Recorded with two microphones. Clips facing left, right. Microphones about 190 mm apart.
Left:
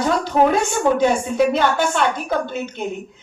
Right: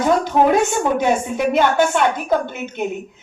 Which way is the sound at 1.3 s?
20° right (ahead or behind).